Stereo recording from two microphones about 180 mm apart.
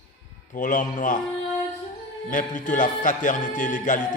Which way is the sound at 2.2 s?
45° left (ahead or behind).